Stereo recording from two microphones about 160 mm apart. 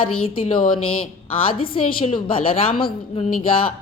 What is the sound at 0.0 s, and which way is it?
Speech, 35° left (ahead or behind).